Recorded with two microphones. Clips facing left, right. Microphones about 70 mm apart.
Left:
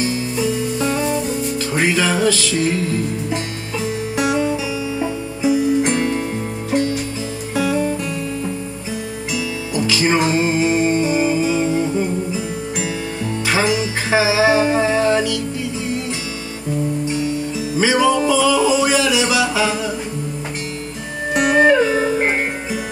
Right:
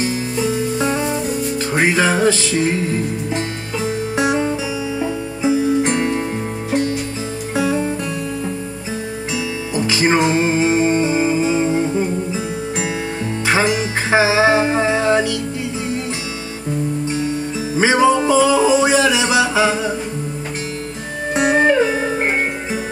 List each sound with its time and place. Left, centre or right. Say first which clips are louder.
0.7 s music: even; right
4.2 s music: even; right
7.5 s music: even; right
9.8 s music: right 1 dB; right
13.5 s music: right 1 dB; right
17.7 s music: right 2 dB; right
21.3 s music: left 1 dB; right